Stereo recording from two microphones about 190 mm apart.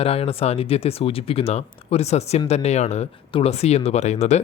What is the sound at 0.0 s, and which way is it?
Speech, 30° left (ahead or behind).